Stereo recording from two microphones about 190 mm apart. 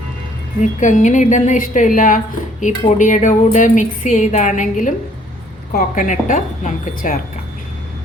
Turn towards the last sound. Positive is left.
turn(degrees=40)  # may be behind; listen again after turning